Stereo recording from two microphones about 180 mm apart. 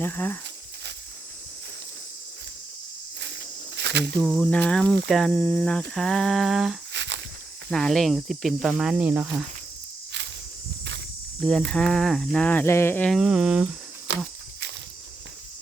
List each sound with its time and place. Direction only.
0.0 s cricket: 10° left (ahead or behind)
3.2 s cricket: 75° right (ahead or behind)
4.4 s cricket: 5° left (ahead or behind)
5.9 s speech: 5° left (ahead or behind)
6.9 s walk: 80° right
7.7 s speech: 5° left (ahead or behind)
11.3 s speech: 5° left (ahead or behind)
13.1 s speech: centre (ahead or behind)